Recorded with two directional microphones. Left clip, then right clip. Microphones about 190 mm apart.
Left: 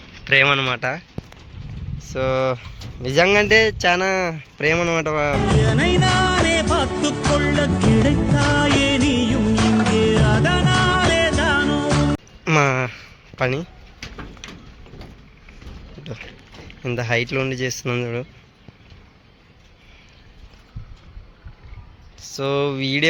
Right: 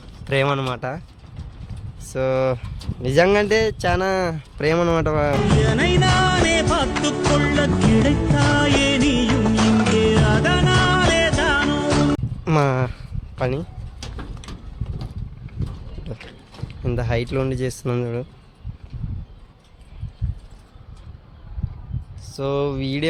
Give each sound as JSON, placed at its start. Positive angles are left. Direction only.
{"t": 0.3, "sound": "speech", "side_deg": -20}
{"t": 2.1, "sound": "speech", "side_deg": -10}
{"t": 3.4, "sound": "speech", "side_deg": -5}
{"t": 5.5, "sound": "music", "side_deg": 0}
{"t": 12.5, "sound": "a sound", "side_deg": -10}
{"t": 14.0, "sound": "a sound", "side_deg": -30}
{"t": 16.8, "sound": "speech", "side_deg": -10}
{"t": 22.2, "sound": "speech", "side_deg": 0}